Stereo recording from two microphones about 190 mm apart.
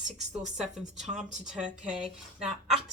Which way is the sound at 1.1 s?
5° right (ahead or behind).